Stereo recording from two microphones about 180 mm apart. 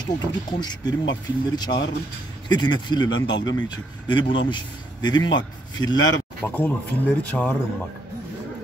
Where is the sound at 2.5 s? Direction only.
25° left (ahead or behind).